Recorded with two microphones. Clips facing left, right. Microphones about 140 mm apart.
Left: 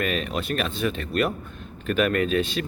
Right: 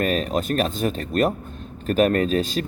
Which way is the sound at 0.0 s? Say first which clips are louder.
Right 4 dB; 40° right (ahead or behind).